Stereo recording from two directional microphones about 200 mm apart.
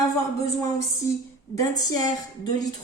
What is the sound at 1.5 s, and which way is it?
A woman's voice, 20° left (ahead or behind).